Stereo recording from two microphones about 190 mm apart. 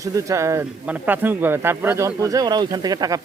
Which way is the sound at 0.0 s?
15° right (ahead or behind).